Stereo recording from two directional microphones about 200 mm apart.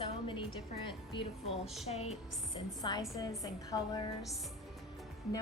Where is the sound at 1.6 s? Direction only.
Centre (ahead or behind).